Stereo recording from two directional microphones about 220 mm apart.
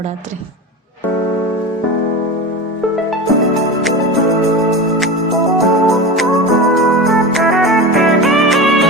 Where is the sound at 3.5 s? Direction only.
Centre (ahead or behind).